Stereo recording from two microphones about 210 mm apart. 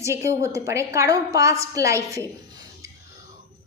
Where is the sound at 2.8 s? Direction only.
15° right (ahead or behind).